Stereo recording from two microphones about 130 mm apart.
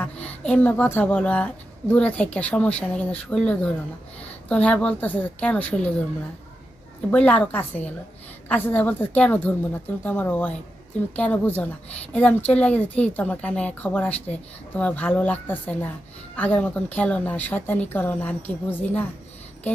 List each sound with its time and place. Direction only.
0.0 s a woman's voice: 10° left (ahead or behind)
7.1 s a woman's voice: 10° left (ahead or behind)